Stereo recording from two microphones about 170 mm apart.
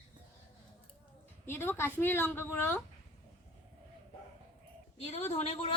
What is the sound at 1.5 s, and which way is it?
A woman's voice, 15° left (ahead or behind).